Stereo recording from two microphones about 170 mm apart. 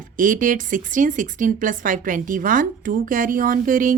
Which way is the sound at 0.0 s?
50° right (ahead or behind).